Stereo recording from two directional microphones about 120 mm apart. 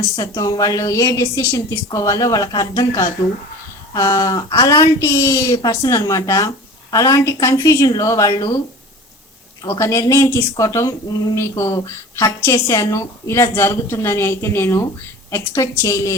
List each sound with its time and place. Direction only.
0.2 s a woman's voice: 30° left (ahead or behind)
9.6 s a woman's voice: 25° left (ahead or behind)